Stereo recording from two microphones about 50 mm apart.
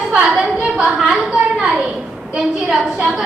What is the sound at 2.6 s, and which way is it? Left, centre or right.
Speech, centre.